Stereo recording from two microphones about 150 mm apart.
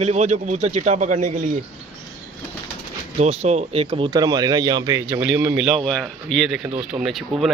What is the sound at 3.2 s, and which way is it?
Speech, 45° right (ahead or behind).